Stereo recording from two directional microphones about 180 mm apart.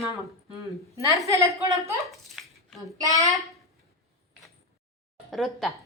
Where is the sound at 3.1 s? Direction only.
20° right (ahead or behind).